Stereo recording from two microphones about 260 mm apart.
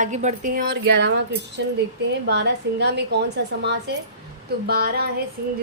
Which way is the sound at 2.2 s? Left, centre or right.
Right.